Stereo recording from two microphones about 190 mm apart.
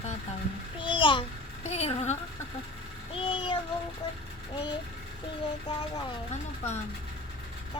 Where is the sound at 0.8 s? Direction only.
25° left (ahead or behind).